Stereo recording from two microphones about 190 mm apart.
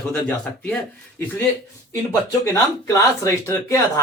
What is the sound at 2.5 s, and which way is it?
Speech, 15° left (ahead or behind).